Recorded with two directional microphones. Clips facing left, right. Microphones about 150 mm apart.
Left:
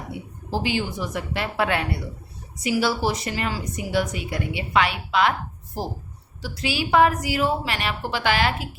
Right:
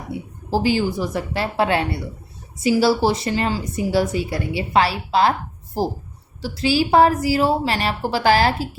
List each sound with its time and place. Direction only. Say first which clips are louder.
0.5 s a woman's voice: right 6 dB; 35° right (ahead or behind)
6.4 s a woman's voice: right 8 dB; 30° right (ahead or behind)